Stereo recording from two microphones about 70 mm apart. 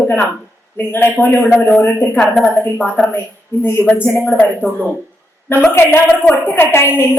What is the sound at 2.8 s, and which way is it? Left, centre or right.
A woman's voice, left.